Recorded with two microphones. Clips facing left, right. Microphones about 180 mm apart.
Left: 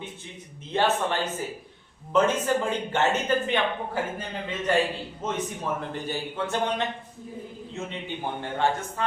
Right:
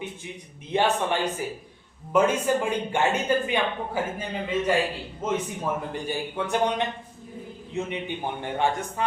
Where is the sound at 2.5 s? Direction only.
10° right (ahead or behind).